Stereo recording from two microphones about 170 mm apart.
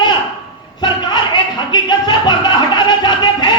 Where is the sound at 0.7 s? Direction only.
25° left (ahead or behind).